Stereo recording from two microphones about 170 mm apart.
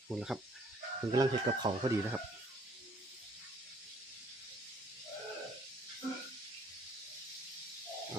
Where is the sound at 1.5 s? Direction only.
35° right (ahead or behind).